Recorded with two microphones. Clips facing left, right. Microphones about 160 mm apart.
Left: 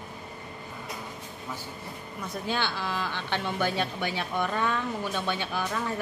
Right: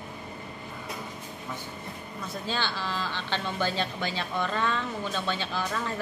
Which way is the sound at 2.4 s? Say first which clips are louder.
Left 2 dB; 15° left (ahead or behind).